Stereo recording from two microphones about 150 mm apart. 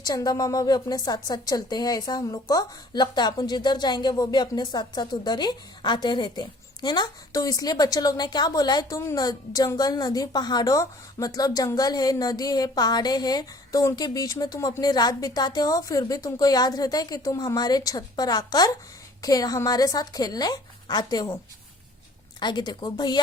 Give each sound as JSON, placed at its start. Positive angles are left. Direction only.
{"t": 0.0, "sound": "a woman's voice", "side_deg": 25}
{"t": 22.4, "sound": "a woman's voice", "side_deg": 30}